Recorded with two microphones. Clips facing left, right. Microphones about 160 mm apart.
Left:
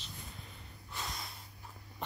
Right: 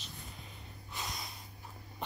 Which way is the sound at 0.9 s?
20° right (ahead or behind).